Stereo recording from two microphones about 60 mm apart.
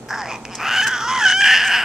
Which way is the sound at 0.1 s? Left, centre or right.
Centre.